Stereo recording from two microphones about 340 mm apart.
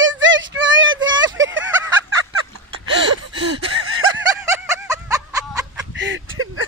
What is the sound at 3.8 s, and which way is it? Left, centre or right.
Snicker, right.